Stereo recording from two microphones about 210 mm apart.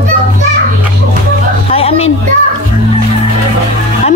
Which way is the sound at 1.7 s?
30° left (ahead or behind).